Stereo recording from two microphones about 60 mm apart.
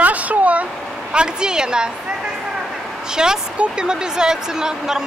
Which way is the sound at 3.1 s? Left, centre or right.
Centre.